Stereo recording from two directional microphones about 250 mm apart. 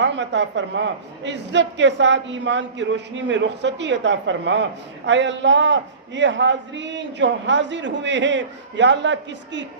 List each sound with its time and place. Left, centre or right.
0.0 s a man's voice: right